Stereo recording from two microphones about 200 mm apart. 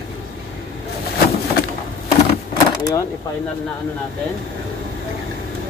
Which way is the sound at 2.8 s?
20° left (ahead or behind).